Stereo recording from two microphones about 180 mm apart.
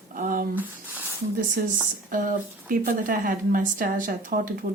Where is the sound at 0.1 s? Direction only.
50° right (ahead or behind).